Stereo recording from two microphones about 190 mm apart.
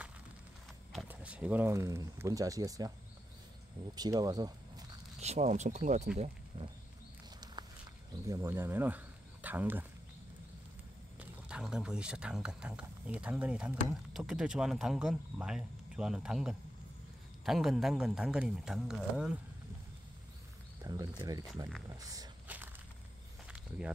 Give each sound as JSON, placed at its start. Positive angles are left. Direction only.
{"t": 0.9, "sound": "speech", "side_deg": -5}
{"t": 3.9, "sound": "speech", "side_deg": -20}
{"t": 5.2, "sound": "speech", "side_deg": -35}
{"t": 8.3, "sound": "speech", "side_deg": -15}
{"t": 11.1, "sound": "speech", "side_deg": -5}
{"t": 20.8, "sound": "speech", "side_deg": -20}